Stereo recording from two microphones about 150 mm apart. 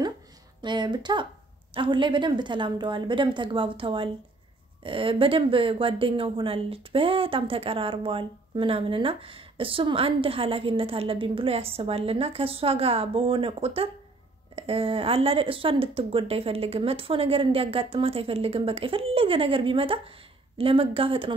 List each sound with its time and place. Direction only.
0.6 s a woman's voice: 30° right (ahead or behind)